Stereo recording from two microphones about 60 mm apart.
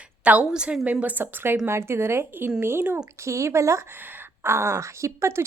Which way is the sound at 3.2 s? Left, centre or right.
Right.